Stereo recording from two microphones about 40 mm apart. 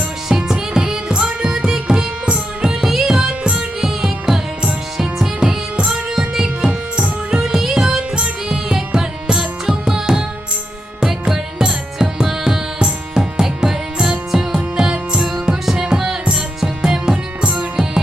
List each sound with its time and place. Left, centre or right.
0.3 s music: centre
2.9 s music: centre
3.2 s music: right
5.7 s music: right
6.1 s music: centre
6.7 s music: right
7.3 s music: centre
7.9 s music: right
11.6 s music: centre